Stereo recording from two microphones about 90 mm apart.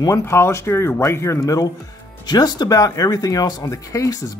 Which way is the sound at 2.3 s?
50° left (ahead or behind).